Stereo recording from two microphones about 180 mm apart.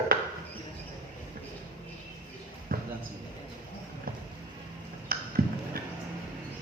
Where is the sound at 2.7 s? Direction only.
55° right (ahead or behind).